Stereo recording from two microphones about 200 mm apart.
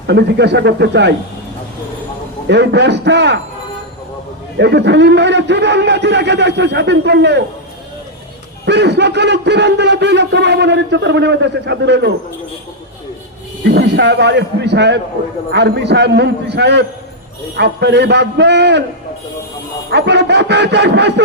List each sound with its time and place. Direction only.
0.1 s speech: 60° right (ahead or behind)
2.5 s speech: 60° right (ahead or behind)
4.5 s speech: 60° right (ahead or behind)
8.6 s speech: 55° right (ahead or behind)
13.7 s speech: 55° right (ahead or behind)
19.9 s speech: 60° right (ahead or behind)